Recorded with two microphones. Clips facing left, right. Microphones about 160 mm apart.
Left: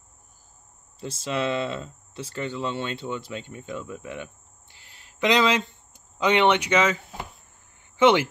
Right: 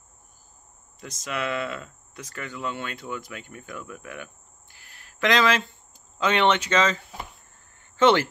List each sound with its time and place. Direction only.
0.9 s speech: 30° left (ahead or behind); by 7.0 s 10° left (ahead or behind)
7.8 s cricket: 15° left (ahead or behind)